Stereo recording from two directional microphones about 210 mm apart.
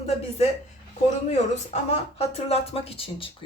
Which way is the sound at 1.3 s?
35° left (ahead or behind).